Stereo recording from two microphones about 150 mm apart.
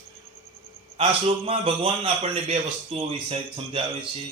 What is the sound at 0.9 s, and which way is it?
Speech, 40° right (ahead or behind).